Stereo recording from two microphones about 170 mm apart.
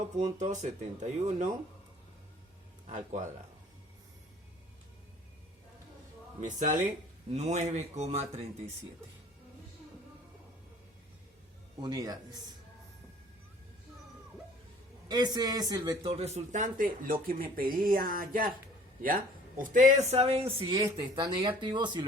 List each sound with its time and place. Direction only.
0.3 s speech: 45° right (ahead or behind)
2.9 s speech: 45° right (ahead or behind)
6.4 s speech: 45° right (ahead or behind)
11.8 s a man's voice: 20° right (ahead or behind)
15.0 s a man's voice: 25° right (ahead or behind)
16.0 s speech: 40° right (ahead or behind)